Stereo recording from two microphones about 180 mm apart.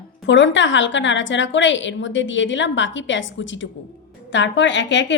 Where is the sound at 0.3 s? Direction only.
90° left.